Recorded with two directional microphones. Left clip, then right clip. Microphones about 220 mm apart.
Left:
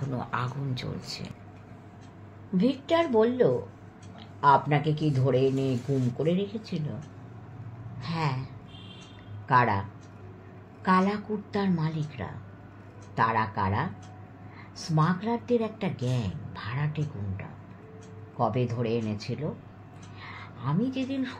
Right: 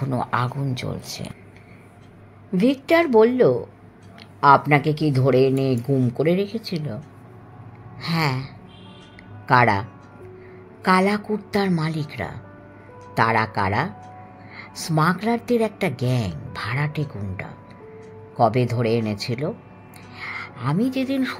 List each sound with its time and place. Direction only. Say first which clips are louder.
0.1 s speech: right 9 dB; 45° right (ahead or behind)
2.5 s speech: right 7 dB; 55° right (ahead or behind)
8.0 s speech: right 8 dB; 50° right (ahead or behind)
9.5 s speech: right 6 dB; 50° right (ahead or behind)